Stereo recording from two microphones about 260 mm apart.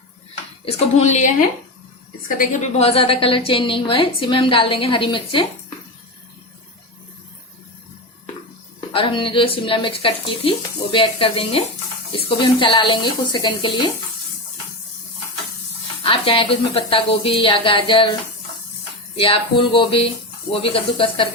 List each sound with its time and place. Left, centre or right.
0.6 s a woman's voice: left
2.4 s a woman's voice: left
8.9 s a woman's voice: centre
16.0 s a woman's voice: left
19.1 s a woman's voice: left